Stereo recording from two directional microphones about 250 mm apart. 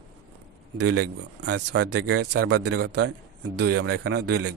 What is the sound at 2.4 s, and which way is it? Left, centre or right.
Speech, right.